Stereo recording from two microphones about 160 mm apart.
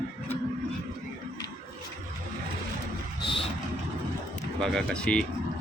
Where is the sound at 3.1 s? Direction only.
30° left (ahead or behind).